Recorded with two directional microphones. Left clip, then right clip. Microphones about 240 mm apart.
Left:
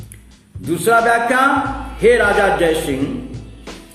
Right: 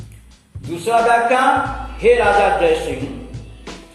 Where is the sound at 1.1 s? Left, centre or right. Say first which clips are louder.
Right 1 dB; left.